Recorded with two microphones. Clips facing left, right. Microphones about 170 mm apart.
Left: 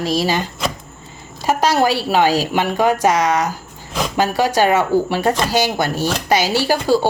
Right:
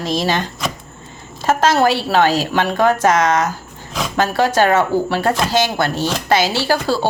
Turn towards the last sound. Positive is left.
turn(degrees=15)  # may be behind; listen again after turning